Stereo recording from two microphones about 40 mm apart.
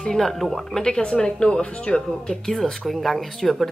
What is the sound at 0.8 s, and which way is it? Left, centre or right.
Speech, left.